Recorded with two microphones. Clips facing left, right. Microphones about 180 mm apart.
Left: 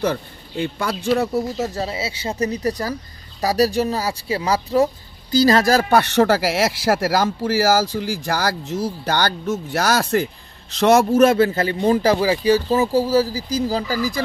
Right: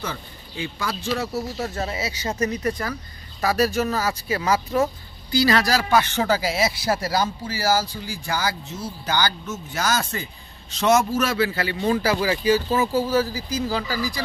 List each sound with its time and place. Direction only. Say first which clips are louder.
0.0 s speech: left 10 dB; 60° left (ahead or behind)
1.8 s speech: left 2 dB; 25° left (ahead or behind)
5.3 s speech: left 5 dB; 40° left (ahead or behind); by 8.2 s 85° left
8.3 s a man's voice: left 2 dB; 70° left (ahead or behind); by 14.2 s 45° left (ahead or behind)